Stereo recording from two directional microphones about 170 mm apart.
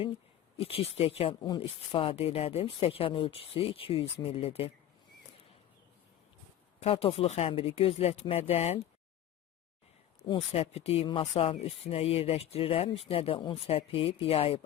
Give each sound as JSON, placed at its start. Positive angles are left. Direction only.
{"t": 0.6, "sound": "speech", "side_deg": 35}
{"t": 6.8, "sound": "speech", "side_deg": 35}
{"t": 10.2, "sound": "speech", "side_deg": 35}